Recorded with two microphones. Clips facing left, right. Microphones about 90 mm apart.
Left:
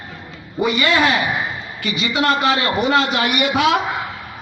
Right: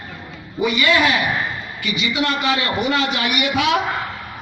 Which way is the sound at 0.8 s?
30° left (ahead or behind).